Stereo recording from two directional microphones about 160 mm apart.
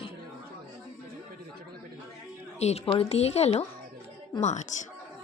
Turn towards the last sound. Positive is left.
turn(degrees=45)  # may be behind; listen again after turning